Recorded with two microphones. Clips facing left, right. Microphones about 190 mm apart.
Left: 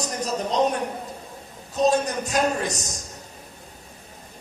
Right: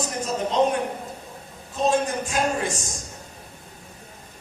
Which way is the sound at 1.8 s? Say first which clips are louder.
Left 1 dB; 40° left (ahead or behind).